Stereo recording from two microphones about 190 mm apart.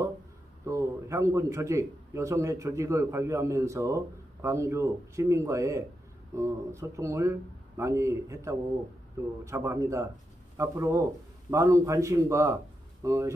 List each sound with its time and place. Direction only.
0.7 s a man's voice: 15° right (ahead or behind)